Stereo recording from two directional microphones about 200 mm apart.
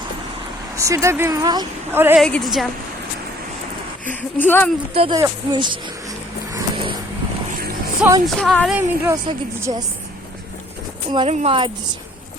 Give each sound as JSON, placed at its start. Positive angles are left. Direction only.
{"t": 0.8, "sound": "a woman's voice", "side_deg": -15}
{"t": 2.2, "sound": "speech", "side_deg": 0}
{"t": 4.0, "sound": "speech", "side_deg": 10}
{"t": 4.9, "sound": "speech", "side_deg": -25}
{"t": 6.5, "sound": "vehicle", "side_deg": -15}
{"t": 8.0, "sound": "a woman's voice", "side_deg": -5}
{"t": 9.0, "sound": "a woman's voice", "side_deg": -15}
{"t": 11.1, "sound": "speech", "side_deg": -25}